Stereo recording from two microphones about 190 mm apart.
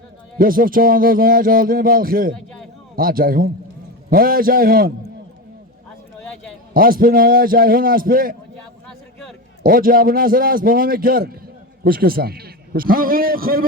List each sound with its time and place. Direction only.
0.3 s speech: 50° right (ahead or behind)
6.7 s speech: 50° right (ahead or behind)
9.6 s speech: 50° right (ahead or behind)